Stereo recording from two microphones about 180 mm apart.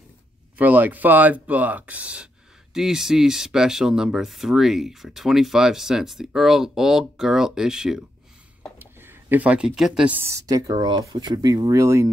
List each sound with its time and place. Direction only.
0.6 s speech: 10° right (ahead or behind)